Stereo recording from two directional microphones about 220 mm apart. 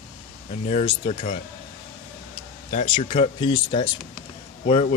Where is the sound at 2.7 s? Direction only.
35° left (ahead or behind).